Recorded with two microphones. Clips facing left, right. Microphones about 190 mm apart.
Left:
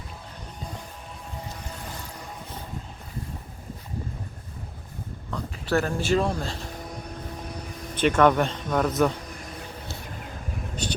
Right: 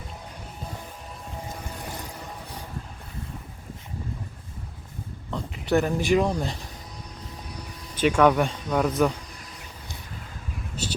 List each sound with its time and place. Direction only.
5.3 s speech: 20° right (ahead or behind)
7.9 s speech: 10° right (ahead or behind)